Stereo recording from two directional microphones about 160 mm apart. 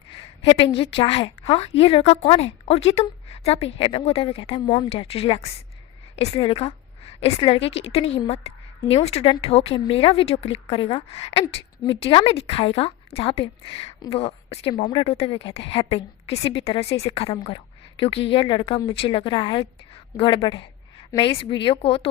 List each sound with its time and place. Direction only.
0.4 s a woman's voice: 35° left (ahead or behind)